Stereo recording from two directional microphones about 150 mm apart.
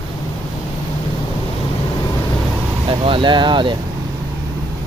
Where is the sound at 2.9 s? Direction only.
35° right (ahead or behind).